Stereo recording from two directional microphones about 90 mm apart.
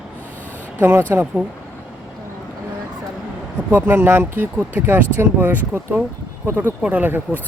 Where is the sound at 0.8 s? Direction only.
25° right (ahead or behind).